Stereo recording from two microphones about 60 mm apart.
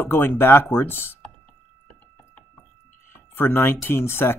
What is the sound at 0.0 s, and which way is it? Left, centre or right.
Speech, left.